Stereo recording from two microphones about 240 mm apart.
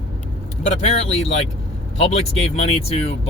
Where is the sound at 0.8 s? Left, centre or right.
Left.